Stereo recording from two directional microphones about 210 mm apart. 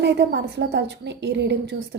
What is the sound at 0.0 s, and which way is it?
A woman's voice, 55° right (ahead or behind).